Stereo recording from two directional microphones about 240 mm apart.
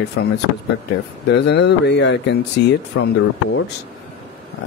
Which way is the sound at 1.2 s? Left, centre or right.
Left.